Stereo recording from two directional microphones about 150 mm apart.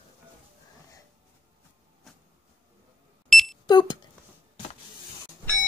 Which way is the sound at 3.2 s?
Centre (ahead or behind).